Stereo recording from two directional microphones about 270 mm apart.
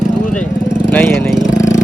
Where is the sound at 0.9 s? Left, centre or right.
Centre.